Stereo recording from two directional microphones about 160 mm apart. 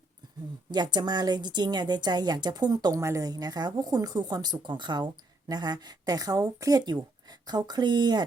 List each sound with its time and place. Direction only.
0.7 s a woman's voice: 25° right (ahead or behind)